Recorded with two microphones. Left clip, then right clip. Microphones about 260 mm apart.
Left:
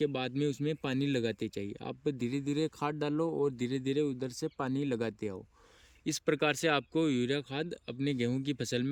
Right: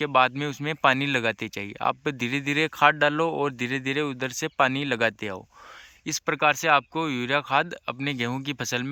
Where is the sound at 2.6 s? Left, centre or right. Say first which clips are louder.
Right 14 dB; right.